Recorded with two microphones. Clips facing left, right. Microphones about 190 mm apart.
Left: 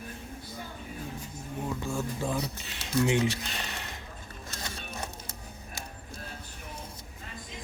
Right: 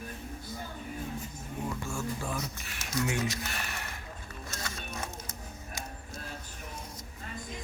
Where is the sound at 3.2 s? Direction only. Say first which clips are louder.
Left 3 dB; 25° left (ahead or behind).